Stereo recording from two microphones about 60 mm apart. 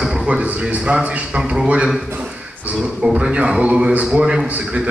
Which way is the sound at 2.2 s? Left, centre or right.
Centre.